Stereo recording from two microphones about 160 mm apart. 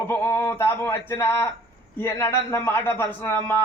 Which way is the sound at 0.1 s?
15° left (ahead or behind).